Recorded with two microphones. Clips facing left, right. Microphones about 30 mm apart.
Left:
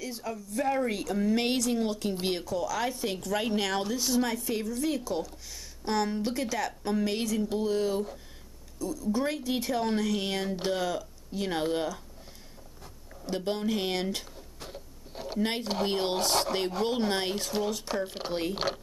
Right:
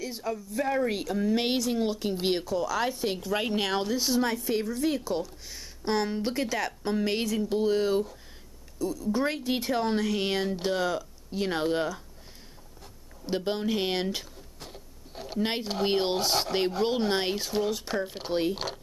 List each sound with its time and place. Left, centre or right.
0.0 s speech: centre
0.8 s speech: centre
13.3 s speech: centre
14.7 s a sound: centre
15.6 s speech: centre
15.9 s speech: centre
17.4 s speech: centre
18.5 s speech: centre